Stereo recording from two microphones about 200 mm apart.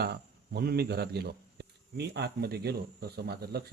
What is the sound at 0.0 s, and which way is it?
A man's voice, 50° right (ahead or behind).